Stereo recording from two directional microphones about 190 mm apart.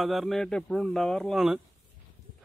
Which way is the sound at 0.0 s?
Centre (ahead or behind).